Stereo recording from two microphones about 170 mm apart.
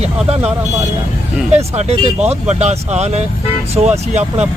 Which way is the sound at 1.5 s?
40° right (ahead or behind).